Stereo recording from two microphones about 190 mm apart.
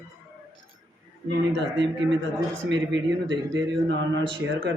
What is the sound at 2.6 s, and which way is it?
Speech, 70° right (ahead or behind).